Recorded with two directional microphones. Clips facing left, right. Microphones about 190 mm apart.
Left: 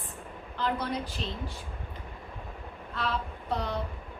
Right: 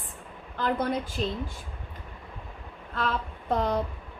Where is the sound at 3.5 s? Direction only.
50° right (ahead or behind).